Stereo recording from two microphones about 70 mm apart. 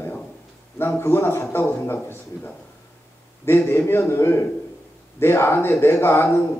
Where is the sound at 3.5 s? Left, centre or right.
Left.